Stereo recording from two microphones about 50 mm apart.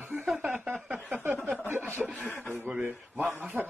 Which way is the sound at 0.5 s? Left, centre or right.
Right.